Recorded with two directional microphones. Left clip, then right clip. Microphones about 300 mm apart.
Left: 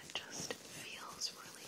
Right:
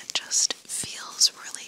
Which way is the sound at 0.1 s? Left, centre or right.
Right.